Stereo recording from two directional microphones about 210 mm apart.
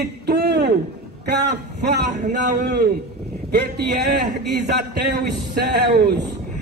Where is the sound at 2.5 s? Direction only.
50° right (ahead or behind).